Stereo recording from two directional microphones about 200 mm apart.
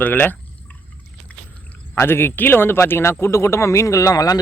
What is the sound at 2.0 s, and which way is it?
Speech, 10° left (ahead or behind).